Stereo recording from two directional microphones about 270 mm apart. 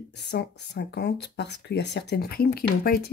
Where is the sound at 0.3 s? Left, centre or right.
Left.